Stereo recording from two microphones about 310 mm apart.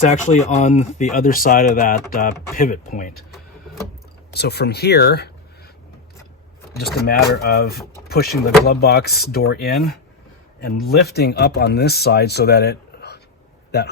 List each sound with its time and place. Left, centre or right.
0.0 s speech: left
4.3 s speech: left
6.7 s a man's voice: left